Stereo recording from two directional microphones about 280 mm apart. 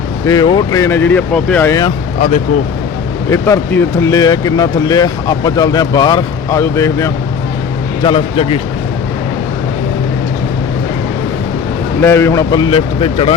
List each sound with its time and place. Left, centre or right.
0.3 s speech: centre
3.2 s a man's voice: centre
12.0 s speech: centre